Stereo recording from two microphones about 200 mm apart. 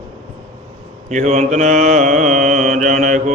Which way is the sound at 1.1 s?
35° right (ahead or behind).